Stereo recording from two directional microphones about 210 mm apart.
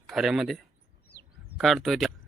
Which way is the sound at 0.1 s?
Centre (ahead or behind).